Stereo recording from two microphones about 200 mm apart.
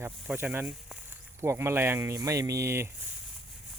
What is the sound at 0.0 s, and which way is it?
Speech, 10° right (ahead or behind).